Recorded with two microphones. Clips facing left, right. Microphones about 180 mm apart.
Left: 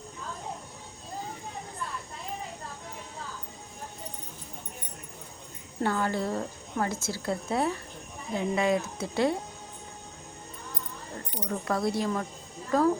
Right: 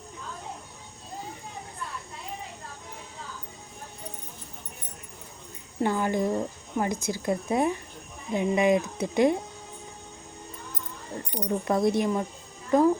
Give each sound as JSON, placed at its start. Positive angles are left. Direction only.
{"t": 5.8, "sound": "speech", "side_deg": -15}
{"t": 11.3, "sound": "speech", "side_deg": -20}